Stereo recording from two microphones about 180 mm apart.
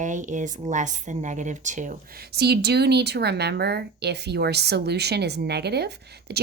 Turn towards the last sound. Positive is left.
turn(degrees=-65)  # may be behind; listen again after turning